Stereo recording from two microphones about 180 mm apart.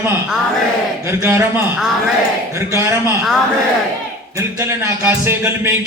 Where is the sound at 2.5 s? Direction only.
15° right (ahead or behind).